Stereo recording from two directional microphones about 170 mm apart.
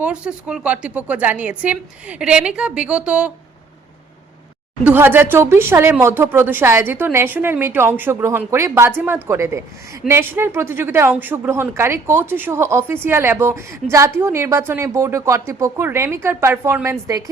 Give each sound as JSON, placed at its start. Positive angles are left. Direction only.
{"t": 0.0, "sound": "speech", "side_deg": -5}
{"t": 4.8, "sound": "speech", "side_deg": -10}